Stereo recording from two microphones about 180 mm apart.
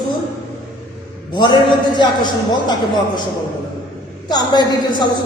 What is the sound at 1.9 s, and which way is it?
A man's voice, 25° left (ahead or behind).